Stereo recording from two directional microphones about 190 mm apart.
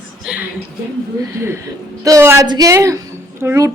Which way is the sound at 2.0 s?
15° right (ahead or behind).